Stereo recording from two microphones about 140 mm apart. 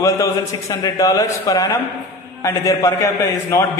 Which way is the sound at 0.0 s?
20° left (ahead or behind).